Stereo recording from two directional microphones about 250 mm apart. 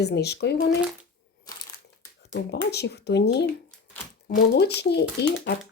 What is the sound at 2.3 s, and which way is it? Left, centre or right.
Speech, left.